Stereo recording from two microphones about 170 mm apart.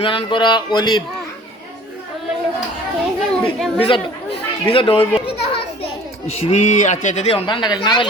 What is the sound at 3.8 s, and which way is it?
A man's voice, 30° left (ahead or behind).